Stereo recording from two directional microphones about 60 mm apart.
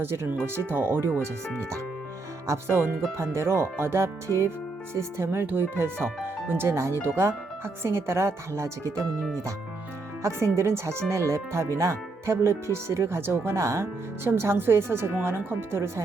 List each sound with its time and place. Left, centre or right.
0.0 s speech: right
2.5 s speech: right
10.2 s speech: right